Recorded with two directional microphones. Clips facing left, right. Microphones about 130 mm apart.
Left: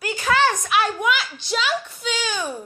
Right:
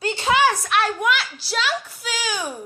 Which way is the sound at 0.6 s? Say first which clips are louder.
Even; centre (ahead or behind).